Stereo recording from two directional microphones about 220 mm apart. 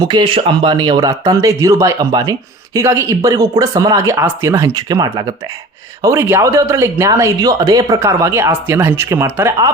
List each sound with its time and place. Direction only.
0.0 s speech: 20° right (ahead or behind)